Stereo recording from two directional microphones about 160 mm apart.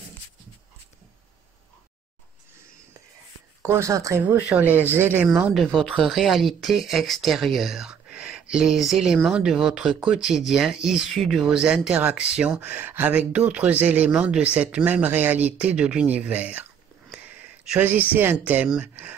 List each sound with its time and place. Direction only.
3.6 s speech: 15° right (ahead or behind)
17.6 s speech: 10° right (ahead or behind)